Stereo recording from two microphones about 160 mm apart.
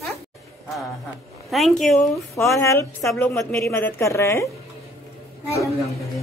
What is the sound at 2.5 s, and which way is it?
Speech, 20° left (ahead or behind).